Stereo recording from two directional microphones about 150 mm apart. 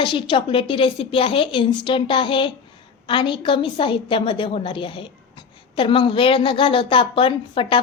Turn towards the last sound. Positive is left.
turn(degrees=35)  # may be behind; listen again after turning